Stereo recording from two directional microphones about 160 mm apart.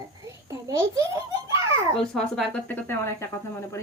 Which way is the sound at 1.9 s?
5° left (ahead or behind).